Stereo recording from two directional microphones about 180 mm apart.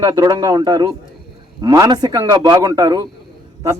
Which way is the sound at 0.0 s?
20° right (ahead or behind).